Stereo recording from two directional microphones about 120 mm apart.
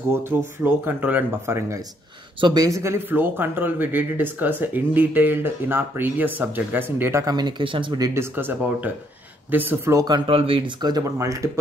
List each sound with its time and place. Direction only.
0.1 s speech: 20° right (ahead or behind)
7.2 s speech: 40° right (ahead or behind)
8.1 s speech: 20° right (ahead or behind)
10.0 s speech: 40° right (ahead or behind)
10.8 s speech: 30° right (ahead or behind)